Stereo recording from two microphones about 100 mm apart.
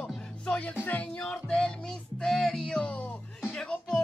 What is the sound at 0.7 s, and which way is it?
Speech, 20° left (ahead or behind).